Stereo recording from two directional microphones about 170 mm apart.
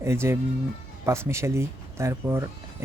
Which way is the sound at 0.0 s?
15° right (ahead or behind).